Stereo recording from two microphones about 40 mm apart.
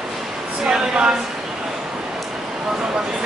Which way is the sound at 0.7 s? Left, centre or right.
Centre.